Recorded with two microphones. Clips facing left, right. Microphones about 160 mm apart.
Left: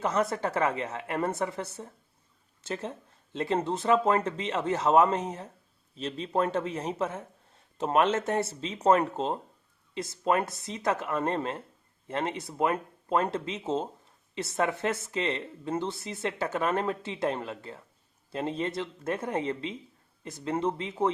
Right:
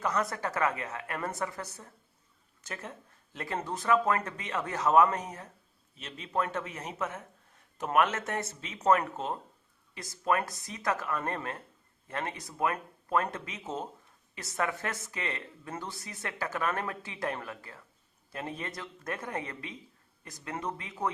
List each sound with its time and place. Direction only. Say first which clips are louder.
0.0 s a man's voice: left 4 dB; 25° left (ahead or behind)